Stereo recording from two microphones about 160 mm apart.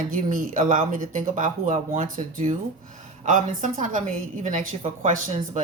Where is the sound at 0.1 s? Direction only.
60° right (ahead or behind).